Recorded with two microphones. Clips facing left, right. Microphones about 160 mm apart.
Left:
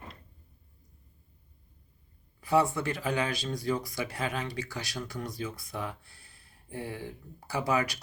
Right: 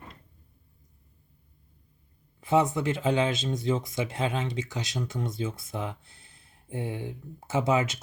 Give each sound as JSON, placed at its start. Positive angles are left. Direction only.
{"t": 2.4, "sound": "speech", "side_deg": -20}